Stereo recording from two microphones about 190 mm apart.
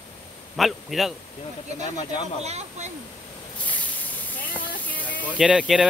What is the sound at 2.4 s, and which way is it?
Speech, 35° right (ahead or behind).